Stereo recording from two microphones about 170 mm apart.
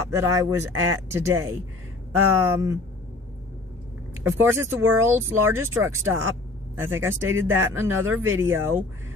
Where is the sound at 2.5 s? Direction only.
20° right (ahead or behind).